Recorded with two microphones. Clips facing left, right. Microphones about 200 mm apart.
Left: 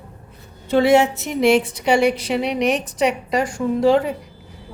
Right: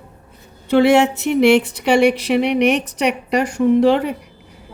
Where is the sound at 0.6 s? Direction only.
65° right (ahead or behind).